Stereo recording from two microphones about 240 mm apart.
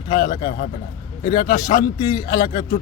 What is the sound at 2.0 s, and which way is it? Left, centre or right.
Speech, centre.